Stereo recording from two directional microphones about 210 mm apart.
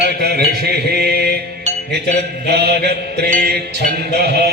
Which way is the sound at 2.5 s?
50° right (ahead or behind).